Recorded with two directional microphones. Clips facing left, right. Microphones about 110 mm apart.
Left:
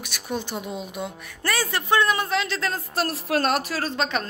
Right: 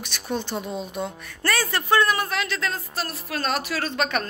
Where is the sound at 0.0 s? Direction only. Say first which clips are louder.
Right 1 dB; 10° left (ahead or behind); by 2.8 s 35° left (ahead or behind).